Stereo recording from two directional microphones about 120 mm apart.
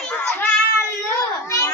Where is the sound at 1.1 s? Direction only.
25° left (ahead or behind).